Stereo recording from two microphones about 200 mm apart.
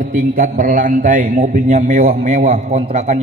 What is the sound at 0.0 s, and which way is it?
A man's voice, 45° right (ahead or behind).